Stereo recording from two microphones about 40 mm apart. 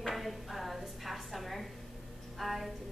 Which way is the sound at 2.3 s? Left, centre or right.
Centre.